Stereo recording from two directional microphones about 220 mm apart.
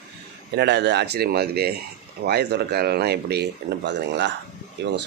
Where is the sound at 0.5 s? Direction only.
50° right (ahead or behind).